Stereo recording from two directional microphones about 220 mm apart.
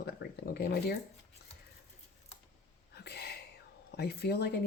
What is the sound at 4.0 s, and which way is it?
Speech, 45° left (ahead or behind).